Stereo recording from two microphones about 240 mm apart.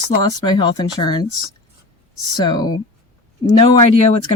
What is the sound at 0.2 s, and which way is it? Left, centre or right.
Speech, centre.